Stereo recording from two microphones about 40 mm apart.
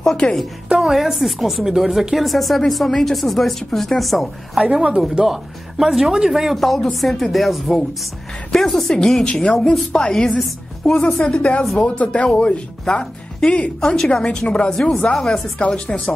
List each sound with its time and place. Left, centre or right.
0.0 s a woman's voice: centre
0.7 s speech: centre
4.6 s a man's voice: centre
6.5 s a woman's voice: centre
11.2 s a woman's voice: left
14.7 s a woman's voice: centre
15.6 s a woman's voice: left